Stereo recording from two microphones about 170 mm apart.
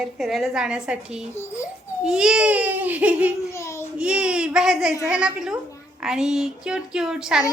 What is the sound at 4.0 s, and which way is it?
Speech, 5° right (ahead or behind).